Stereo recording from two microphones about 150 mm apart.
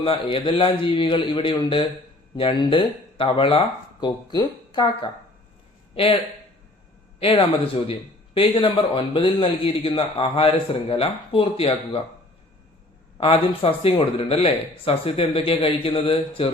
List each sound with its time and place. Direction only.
0.0 s a man's voice: 35° left (ahead or behind)
5.9 s speech: 40° left (ahead or behind)
7.2 s a man's voice: 40° left (ahead or behind)
13.1 s a man's voice: 35° left (ahead or behind)